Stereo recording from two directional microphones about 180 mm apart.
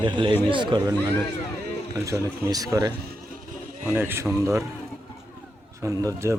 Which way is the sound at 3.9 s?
10° right (ahead or behind).